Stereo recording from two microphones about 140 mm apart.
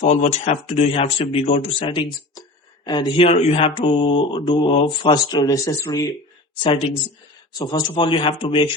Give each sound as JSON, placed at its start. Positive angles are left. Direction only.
{"t": 0.0, "sound": "speech", "side_deg": 55}
{"t": 6.6, "sound": "speech", "side_deg": 40}